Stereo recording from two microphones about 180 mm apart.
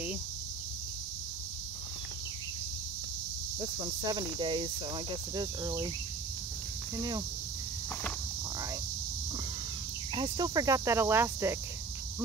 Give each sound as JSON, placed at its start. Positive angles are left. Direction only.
{"t": 4.1, "sound": "speech", "side_deg": -25}
{"t": 7.0, "sound": "speech", "side_deg": -20}
{"t": 10.1, "sound": "speech", "side_deg": -25}